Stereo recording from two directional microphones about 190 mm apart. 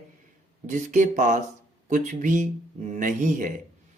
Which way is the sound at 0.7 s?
40° right (ahead or behind).